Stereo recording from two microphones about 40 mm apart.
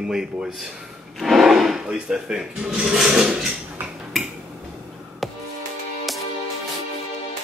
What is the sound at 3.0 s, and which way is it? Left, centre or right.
Speech, centre.